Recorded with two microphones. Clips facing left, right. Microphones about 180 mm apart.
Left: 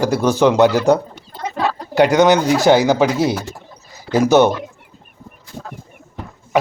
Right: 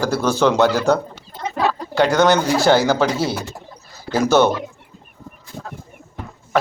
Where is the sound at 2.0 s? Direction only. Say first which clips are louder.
Left 3 dB; 15° left (ahead or behind).